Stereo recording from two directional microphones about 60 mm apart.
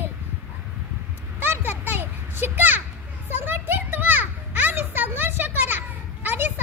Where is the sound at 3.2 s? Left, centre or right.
Right.